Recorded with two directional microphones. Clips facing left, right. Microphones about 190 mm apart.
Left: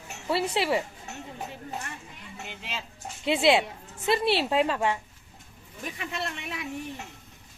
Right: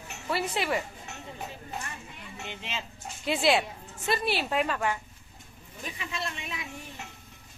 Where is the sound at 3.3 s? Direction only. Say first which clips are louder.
Left 3 dB; 25° left (ahead or behind).